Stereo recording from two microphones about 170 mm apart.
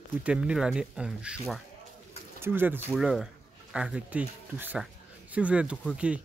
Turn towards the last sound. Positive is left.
turn(degrees=-5)  # may be behind; listen again after turning